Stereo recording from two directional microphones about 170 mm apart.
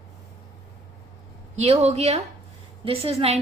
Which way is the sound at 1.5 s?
40° right (ahead or behind).